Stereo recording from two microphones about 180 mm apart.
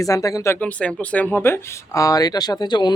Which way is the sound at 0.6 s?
5° left (ahead or behind).